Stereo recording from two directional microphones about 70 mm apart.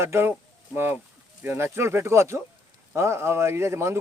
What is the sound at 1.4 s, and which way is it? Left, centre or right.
Speech, right.